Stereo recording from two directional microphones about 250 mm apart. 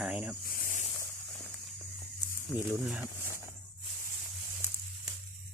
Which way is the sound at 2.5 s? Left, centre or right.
Centre.